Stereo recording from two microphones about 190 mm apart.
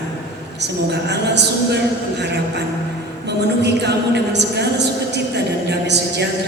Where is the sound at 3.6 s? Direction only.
60° right (ahead or behind).